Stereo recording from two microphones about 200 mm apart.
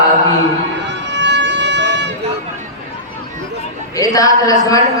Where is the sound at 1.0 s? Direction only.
60° right (ahead or behind).